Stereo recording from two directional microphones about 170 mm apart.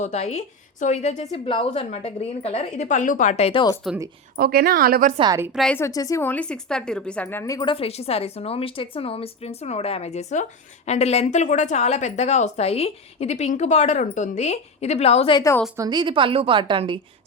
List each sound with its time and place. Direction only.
0.0 s a woman's voice: 40° left (ahead or behind)
4.4 s a woman's voice: 65° right (ahead or behind)
5.2 s a woman's voice: 20° right (ahead or behind)
5.5 s a woman's voice: centre (ahead or behind)
5.7 s a woman's voice: 20° left (ahead or behind); by 15.4 s 35° left (ahead or behind)
15.7 s a woman's voice: 20° right (ahead or behind)